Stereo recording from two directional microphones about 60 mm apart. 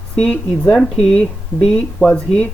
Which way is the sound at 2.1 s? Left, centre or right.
Centre.